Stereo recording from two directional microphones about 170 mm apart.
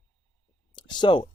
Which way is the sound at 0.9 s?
25° left (ahead or behind).